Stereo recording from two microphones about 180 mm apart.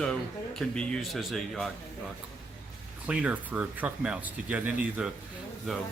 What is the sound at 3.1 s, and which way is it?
A man's voice, 5° right (ahead or behind).